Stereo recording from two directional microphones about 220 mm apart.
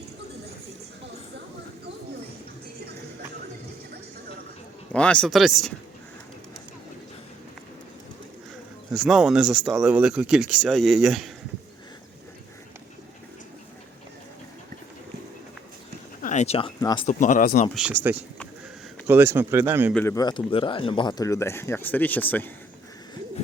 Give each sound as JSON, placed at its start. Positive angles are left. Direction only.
{"t": 4.9, "sound": "speech", "side_deg": 5}
{"t": 8.9, "sound": "speech", "side_deg": 0}
{"t": 16.2, "sound": "speech", "side_deg": 30}
{"t": 17.1, "sound": "speech", "side_deg": 35}
{"t": 17.7, "sound": "speech", "side_deg": -5}
{"t": 19.9, "sound": "speech", "side_deg": 10}